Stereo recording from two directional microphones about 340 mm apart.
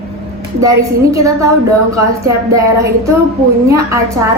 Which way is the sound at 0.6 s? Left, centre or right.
Centre.